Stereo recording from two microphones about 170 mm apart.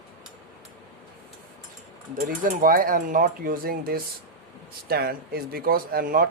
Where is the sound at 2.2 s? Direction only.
55° right (ahead or behind).